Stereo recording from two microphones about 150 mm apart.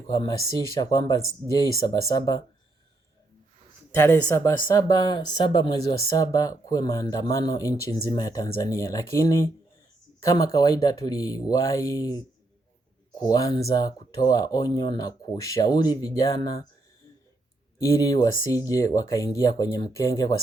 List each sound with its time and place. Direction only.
0.1 s speech: 25° left (ahead or behind)
3.9 s speech: 20° left (ahead or behind)
17.7 s speech: 20° left (ahead or behind)